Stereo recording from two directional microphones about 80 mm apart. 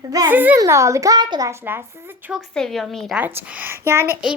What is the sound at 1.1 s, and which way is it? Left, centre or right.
Speech, right.